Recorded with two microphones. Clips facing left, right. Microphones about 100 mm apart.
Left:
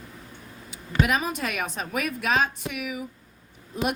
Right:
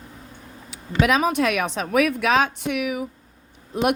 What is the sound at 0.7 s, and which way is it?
Speech, 90° right.